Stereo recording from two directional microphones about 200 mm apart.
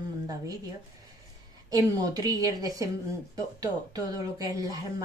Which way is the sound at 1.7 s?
20° right (ahead or behind).